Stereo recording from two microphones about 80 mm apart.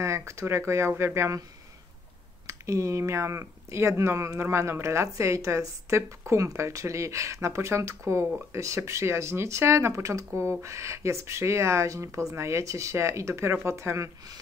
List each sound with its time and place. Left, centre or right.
0.0 s speech: right
2.4 s speech: right